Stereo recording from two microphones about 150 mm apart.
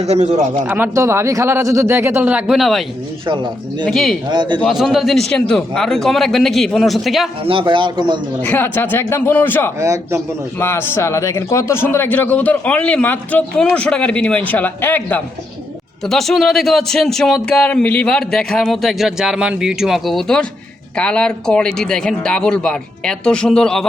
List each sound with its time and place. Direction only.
0.0 s speech: 45° right (ahead or behind)
0.7 s speech: 15° right (ahead or behind); by 2.8 s centre (ahead or behind)
3.2 s a man's voice: 30° right (ahead or behind)
3.8 s a man's voice: centre (ahead or behind)
4.3 s a man's voice: 30° right (ahead or behind)
4.7 s a man's voice: centre (ahead or behind)
7.4 s a man's voice: 35° right (ahead or behind)
8.4 s a man's voice: 15° left (ahead or behind)
9.8 s a man's voice: 20° right (ahead or behind)
10.6 s a man's voice: 15° left (ahead or behind)
16.0 s a man's voice: centre (ahead or behind)